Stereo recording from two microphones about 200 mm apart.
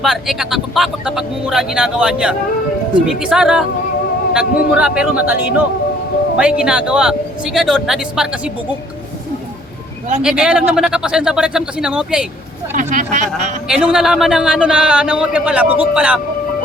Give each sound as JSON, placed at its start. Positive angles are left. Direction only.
{"t": 0.0, "sound": "a man's voice", "side_deg": 0}
{"t": 10.2, "sound": "a man's voice", "side_deg": -5}
{"t": 12.7, "sound": "speech", "side_deg": -40}
{"t": 13.7, "sound": "a man's voice", "side_deg": -5}